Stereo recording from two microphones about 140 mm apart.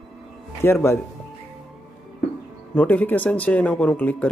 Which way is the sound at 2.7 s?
10° left (ahead or behind).